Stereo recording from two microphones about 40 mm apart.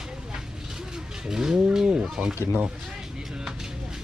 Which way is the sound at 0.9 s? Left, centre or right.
Centre.